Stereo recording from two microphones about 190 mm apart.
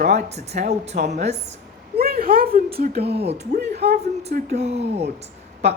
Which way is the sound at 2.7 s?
55° right (ahead or behind).